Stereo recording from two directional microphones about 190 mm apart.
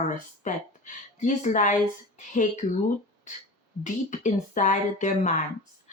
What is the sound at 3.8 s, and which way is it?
Speech, 40° left (ahead or behind).